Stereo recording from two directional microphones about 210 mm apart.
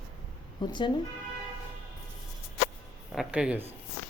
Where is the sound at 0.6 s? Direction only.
20° left (ahead or behind).